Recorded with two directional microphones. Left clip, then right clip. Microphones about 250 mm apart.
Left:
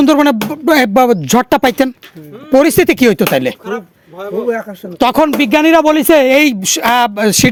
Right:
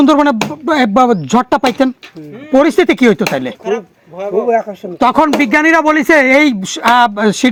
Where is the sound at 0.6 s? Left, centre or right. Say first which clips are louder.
Left 2 dB; left.